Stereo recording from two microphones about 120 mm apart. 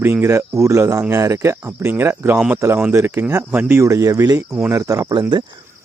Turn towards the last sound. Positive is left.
turn(degrees=-30)  # may be behind; listen again after turning